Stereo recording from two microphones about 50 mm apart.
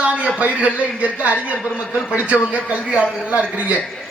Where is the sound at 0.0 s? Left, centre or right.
Right.